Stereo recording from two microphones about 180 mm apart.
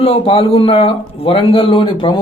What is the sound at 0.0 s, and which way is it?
A man's voice, 30° left (ahead or behind).